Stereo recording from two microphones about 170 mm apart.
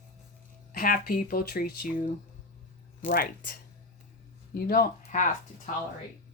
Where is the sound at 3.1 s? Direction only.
55° left (ahead or behind).